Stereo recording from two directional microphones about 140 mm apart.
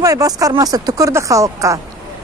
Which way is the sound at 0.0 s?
25° right (ahead or behind).